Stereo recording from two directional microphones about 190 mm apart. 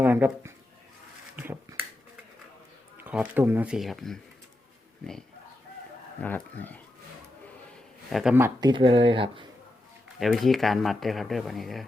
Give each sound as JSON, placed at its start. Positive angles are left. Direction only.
{"t": 0.0, "sound": "speech", "side_deg": -10}
{"t": 3.0, "sound": "speech", "side_deg": -10}
{"t": 6.2, "sound": "speech", "side_deg": 10}
{"t": 8.1, "sound": "speech", "side_deg": -5}
{"t": 8.7, "sound": "speech", "side_deg": -25}
{"t": 10.2, "sound": "speech", "side_deg": 0}